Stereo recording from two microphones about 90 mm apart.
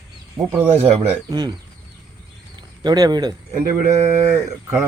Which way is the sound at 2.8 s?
50° right (ahead or behind).